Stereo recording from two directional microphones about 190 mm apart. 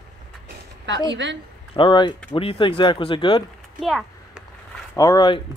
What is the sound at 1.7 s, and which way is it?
Speech, 25° left (ahead or behind).